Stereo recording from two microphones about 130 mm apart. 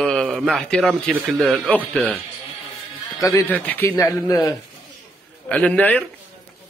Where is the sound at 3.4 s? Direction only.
15° left (ahead or behind).